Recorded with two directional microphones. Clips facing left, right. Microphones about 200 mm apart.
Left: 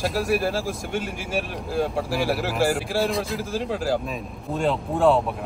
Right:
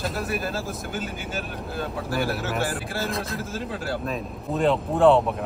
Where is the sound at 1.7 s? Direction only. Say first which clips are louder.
Left 7 dB; 90° left.